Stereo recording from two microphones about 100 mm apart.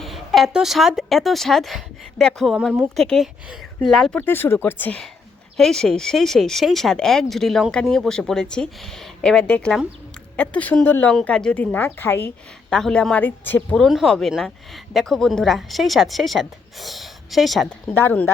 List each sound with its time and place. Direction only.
0.0 s a woman's voice: centre (ahead or behind)
4.3 s speech: 20° left (ahead or behind)
5.5 s a woman's voice: 5° left (ahead or behind); by 11.1 s 20° left (ahead or behind)
11.1 s speech: 5° left (ahead or behind); by 12.3 s 20° left (ahead or behind)
12.7 s speech: 5° left (ahead or behind)
13.7 s a woman's voice: centre (ahead or behind)
17.7 s speech: 20° left (ahead or behind)